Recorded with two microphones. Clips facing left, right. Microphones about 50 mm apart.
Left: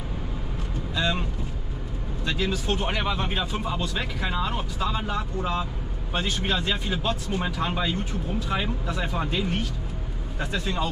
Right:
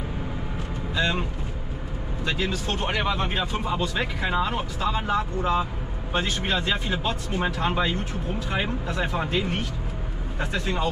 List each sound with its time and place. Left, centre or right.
0.9 s speech: centre
2.2 s speech: centre
2.7 s speech: centre